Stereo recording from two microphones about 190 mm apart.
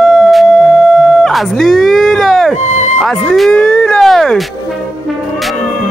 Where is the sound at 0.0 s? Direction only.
Centre (ahead or behind).